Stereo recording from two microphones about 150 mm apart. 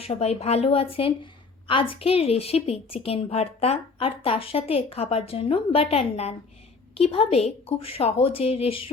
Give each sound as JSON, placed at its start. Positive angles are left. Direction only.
{"t": 0.0, "sound": "a woman's voice", "side_deg": 45}